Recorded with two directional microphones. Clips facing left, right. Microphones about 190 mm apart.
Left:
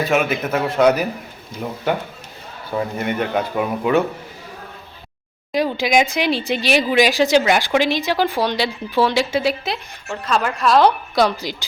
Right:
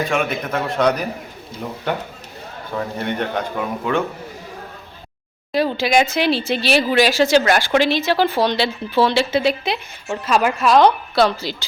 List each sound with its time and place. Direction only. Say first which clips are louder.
0.1 s a woman's voice: left 2 dB; 5° left (ahead or behind)
5.7 s speech: even; 15° left (ahead or behind)
9.7 s a woman's voice: right 3 dB; 5° right (ahead or behind)
11.1 s a woman's voice: right 1 dB; 15° left (ahead or behind)